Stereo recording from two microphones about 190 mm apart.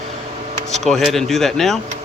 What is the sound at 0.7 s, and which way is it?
Speech, centre (ahead or behind).